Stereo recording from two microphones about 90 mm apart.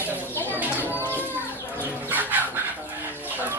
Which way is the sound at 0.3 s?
20° left (ahead or behind).